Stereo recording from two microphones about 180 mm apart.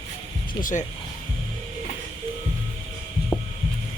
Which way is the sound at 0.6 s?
45° left (ahead or behind).